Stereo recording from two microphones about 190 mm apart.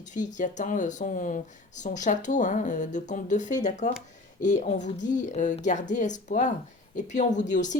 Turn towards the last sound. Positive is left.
turn(degrees=40)  # may be behind; listen again after turning